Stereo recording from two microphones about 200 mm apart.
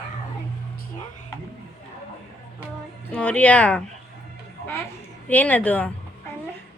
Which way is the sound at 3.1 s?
5° left (ahead or behind).